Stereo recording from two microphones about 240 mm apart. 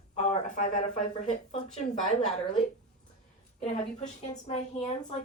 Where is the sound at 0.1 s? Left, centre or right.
Left.